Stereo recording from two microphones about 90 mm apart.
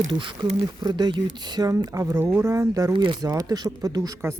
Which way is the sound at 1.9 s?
35° right (ahead or behind).